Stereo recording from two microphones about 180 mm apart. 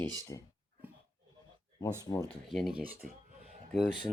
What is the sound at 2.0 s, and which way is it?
Speech, 20° left (ahead or behind).